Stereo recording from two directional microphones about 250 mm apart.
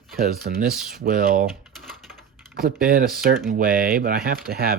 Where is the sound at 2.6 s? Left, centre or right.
Right.